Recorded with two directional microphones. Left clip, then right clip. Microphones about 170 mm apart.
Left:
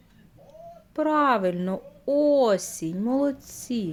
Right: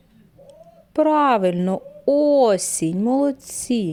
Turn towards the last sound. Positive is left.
turn(degrees=-45)  # may be behind; listen again after turning